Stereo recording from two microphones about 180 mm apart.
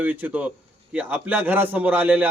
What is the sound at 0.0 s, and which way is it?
A man's voice, 10° right (ahead or behind).